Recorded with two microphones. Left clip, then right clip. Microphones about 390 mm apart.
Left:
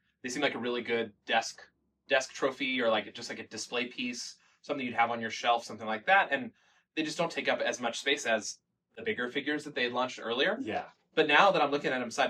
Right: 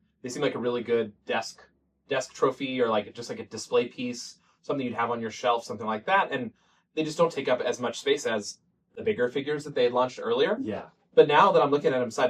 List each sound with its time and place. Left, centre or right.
0.2 s speech: centre